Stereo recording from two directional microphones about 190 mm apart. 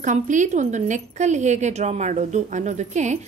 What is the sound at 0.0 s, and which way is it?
Speech, 40° right (ahead or behind).